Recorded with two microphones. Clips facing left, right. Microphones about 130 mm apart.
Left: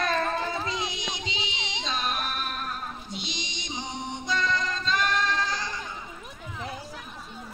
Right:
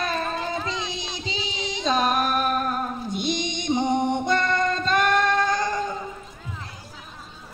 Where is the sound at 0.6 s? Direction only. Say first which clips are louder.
Right 1 dB; 30° right (ahead or behind); by 5.9 s 50° right (ahead or behind).